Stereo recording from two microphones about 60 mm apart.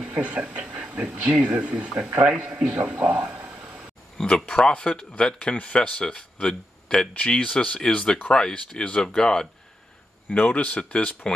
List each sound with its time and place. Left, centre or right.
0.0 s speech: centre
4.2 s speech: centre
10.3 s speech: left